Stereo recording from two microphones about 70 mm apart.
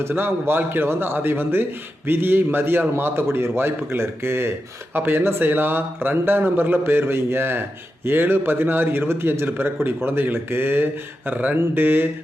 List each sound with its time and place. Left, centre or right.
0.1 s a man's voice: right